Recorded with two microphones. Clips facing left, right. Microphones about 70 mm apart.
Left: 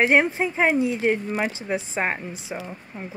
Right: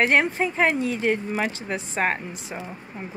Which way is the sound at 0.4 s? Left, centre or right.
Centre.